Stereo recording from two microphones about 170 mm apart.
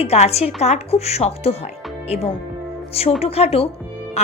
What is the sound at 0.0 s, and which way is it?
A woman's voice, 35° left (ahead or behind).